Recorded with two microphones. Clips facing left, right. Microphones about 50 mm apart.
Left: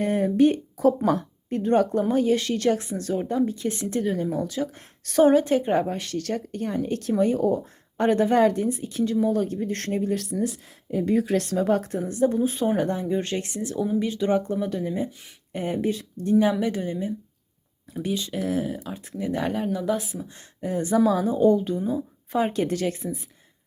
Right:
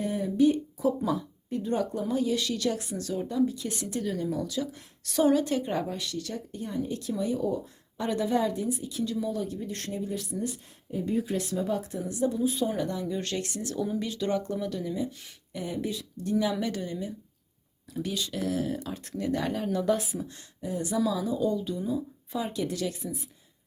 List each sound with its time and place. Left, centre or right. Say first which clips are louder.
0.0 s speech: left 5 dB; left
6.1 s speech: left 7 dB; left
8.7 s speech: left 6 dB; left
10.9 s speech: left 7 dB; left
16.6 s speech: left 5 dB; left
18.6 s speech: left 1 dB; centre
19.7 s a woman's voice: left 1 dB; centre
20.6 s speech: left 7 dB; left